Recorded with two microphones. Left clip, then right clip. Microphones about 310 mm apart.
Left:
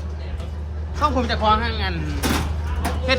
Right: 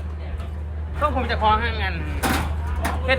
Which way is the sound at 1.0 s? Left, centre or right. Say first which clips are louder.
Left 1 dB; centre.